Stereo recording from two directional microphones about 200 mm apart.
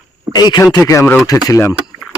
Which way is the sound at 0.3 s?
20° left (ahead or behind).